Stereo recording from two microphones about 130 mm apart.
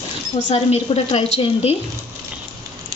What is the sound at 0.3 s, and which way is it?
A woman's voice, 60° left (ahead or behind).